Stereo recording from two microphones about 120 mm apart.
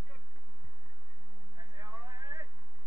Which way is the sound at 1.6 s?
30° right (ahead or behind).